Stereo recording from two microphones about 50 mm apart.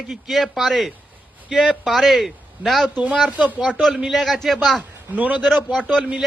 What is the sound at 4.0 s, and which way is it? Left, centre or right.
Speech, centre.